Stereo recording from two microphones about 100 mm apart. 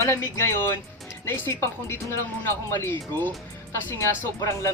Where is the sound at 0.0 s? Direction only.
25° left (ahead or behind).